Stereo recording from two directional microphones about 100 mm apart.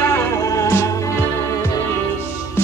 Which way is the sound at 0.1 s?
30° left (ahead or behind).